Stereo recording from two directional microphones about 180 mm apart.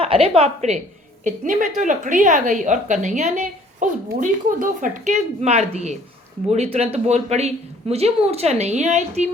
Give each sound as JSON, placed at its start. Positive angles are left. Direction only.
{"t": 0.0, "sound": "a woman's voice", "side_deg": -35}